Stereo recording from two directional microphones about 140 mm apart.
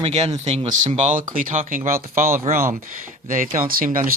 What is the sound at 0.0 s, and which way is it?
Speech, 50° right (ahead or behind).